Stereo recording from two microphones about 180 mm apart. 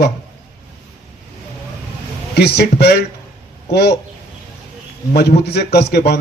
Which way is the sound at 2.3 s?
65° left (ahead or behind).